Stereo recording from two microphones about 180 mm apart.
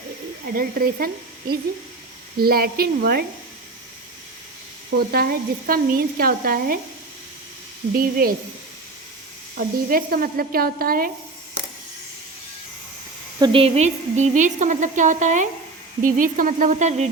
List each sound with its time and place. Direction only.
0.5 s a woman's voice: 55° right (ahead or behind)
4.9 s a woman's voice: 55° right (ahead or behind)
7.9 s a woman's voice: 55° right (ahead or behind)
9.6 s a woman's voice: 50° right (ahead or behind)
13.4 s a woman's voice: 30° right (ahead or behind)